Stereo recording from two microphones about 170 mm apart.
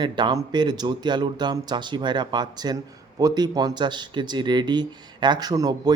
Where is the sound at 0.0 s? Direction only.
25° right (ahead or behind).